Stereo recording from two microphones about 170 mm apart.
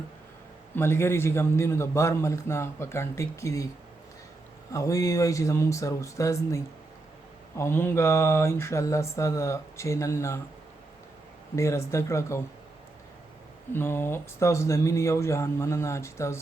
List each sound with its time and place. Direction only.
0.8 s a man's voice: 15° left (ahead or behind)
4.7 s a man's voice: 20° left (ahead or behind)
11.5 s a man's voice: 15° left (ahead or behind)
13.7 s a man's voice: 15° left (ahead or behind)